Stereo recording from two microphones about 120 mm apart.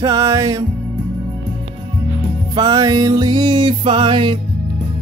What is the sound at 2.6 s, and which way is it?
Music, 35° right (ahead or behind).